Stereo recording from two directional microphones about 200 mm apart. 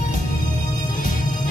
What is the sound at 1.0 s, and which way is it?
Music, 40° left (ahead or behind).